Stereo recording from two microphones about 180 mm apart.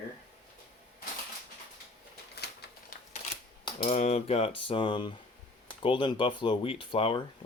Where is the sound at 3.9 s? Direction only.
40° left (ahead or behind).